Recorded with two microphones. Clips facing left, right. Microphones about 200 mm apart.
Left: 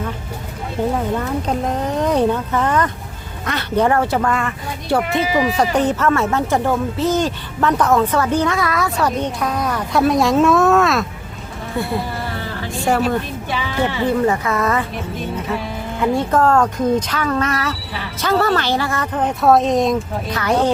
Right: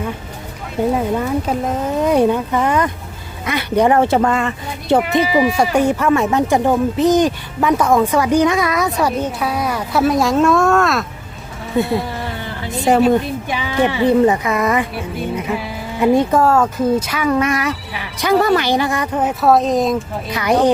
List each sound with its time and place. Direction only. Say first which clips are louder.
0.9 s speech: right 3 dB; 10° right (ahead or behind)
5.3 s speech: right 1 dB; 5° right (ahead or behind)
11.8 s speech: right 5 dB; 20° right (ahead or behind)
16.0 s speech: right 4 dB; 15° right (ahead or behind)
20.4 s speech: right 3 dB; 15° right (ahead or behind)